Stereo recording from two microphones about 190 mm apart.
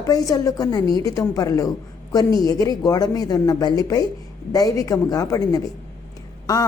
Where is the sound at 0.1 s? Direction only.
20° left (ahead or behind).